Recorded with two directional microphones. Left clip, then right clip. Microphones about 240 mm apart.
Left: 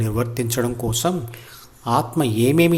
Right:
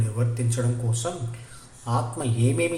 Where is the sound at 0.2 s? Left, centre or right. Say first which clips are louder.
Left 7 dB; left.